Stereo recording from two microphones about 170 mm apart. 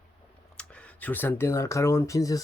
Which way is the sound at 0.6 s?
5° left (ahead or behind).